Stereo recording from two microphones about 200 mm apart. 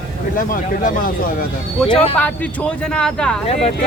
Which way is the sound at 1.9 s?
30° left (ahead or behind).